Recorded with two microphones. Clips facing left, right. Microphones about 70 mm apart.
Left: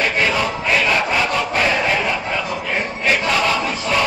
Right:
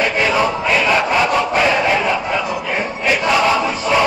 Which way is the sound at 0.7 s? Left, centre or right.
Centre.